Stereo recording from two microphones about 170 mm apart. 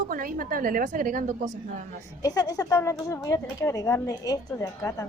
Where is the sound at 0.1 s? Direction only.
55° right (ahead or behind).